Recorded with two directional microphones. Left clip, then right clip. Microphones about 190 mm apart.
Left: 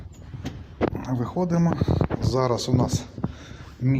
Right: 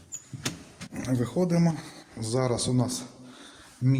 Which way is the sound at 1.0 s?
10° right (ahead or behind).